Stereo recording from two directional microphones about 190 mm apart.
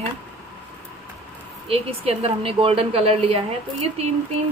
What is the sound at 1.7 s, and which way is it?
A woman's voice, 30° right (ahead or behind).